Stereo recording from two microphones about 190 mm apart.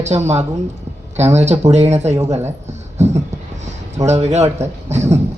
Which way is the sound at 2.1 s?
15° right (ahead or behind).